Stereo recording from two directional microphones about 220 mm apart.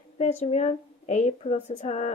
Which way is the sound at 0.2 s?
30° left (ahead or behind).